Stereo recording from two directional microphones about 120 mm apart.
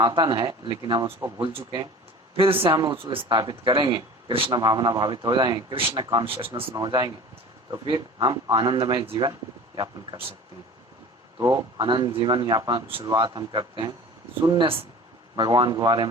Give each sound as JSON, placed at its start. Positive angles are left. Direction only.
{"t": 0.0, "sound": "a man's voice", "side_deg": -40}
{"t": 4.5, "sound": "speech", "side_deg": -40}
{"t": 11.3, "sound": "speech", "side_deg": -30}